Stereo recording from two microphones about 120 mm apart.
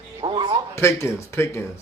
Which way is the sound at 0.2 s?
40° right (ahead or behind).